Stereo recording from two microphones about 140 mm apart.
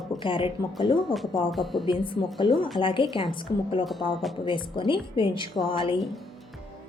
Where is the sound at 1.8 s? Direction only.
35° left (ahead or behind).